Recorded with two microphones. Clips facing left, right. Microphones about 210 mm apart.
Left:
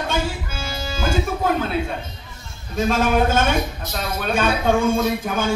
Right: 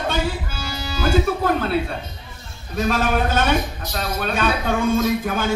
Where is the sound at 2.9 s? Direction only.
45° left (ahead or behind).